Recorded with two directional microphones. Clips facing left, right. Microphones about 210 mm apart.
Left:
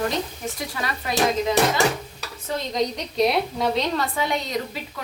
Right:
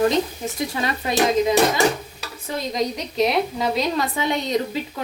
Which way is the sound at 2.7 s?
5° right (ahead or behind).